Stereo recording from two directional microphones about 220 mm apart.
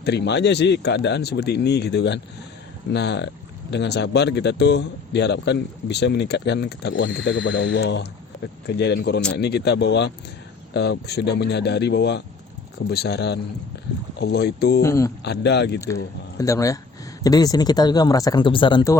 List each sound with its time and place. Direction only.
0.0 s speech: 50° left (ahead or behind)
14.8 s speech: 15° left (ahead or behind)
15.2 s speech: 50° left (ahead or behind)
16.4 s speech: 15° left (ahead or behind)